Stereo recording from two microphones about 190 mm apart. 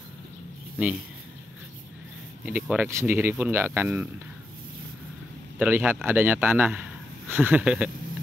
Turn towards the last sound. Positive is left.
turn(degrees=-5)  # may be behind; listen again after turning